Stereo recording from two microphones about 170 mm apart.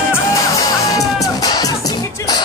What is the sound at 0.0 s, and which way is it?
Music, 15° left (ahead or behind).